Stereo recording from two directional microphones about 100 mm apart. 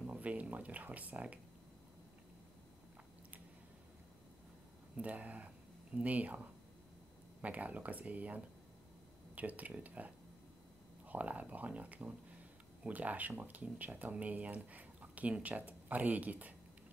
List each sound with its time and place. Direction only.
0.0 s speech: 15° right (ahead or behind)
4.9 s speech: 15° right (ahead or behind)
7.4 s speech: 15° right (ahead or behind)